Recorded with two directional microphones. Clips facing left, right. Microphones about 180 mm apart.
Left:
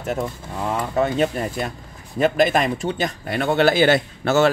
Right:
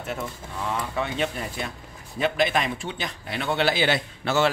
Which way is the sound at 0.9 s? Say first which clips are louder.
Left 11 dB; 45° left (ahead or behind).